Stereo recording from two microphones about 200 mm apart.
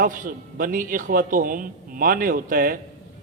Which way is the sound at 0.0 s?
40° right (ahead or behind).